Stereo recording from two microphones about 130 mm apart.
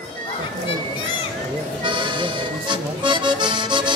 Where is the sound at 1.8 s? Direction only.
35° right (ahead or behind).